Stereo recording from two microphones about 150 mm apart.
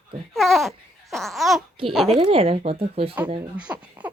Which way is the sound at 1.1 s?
Centre (ahead or behind).